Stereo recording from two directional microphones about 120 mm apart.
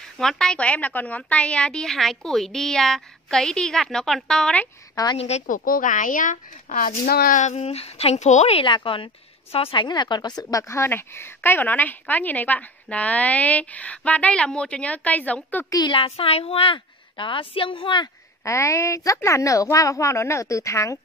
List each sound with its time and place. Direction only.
0.2 s a woman's voice: 5° left (ahead or behind)
5.1 s a woman's voice: 65° left (ahead or behind); by 6.8 s 90° left
7.3 s a woman's voice: 70° left (ahead or behind); by 10.6 s 35° left (ahead or behind)
10.7 s a woman's voice: 20° left (ahead or behind)
15.7 s a child's voice: 35° left (ahead or behind)
16.0 s a woman's voice: 50° left (ahead or behind)
18.4 s a woman's voice: 25° left (ahead or behind)